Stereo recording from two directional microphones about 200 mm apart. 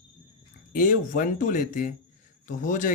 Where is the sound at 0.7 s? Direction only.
40° left (ahead or behind).